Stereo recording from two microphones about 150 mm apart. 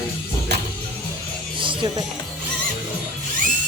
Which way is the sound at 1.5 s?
35° right (ahead or behind).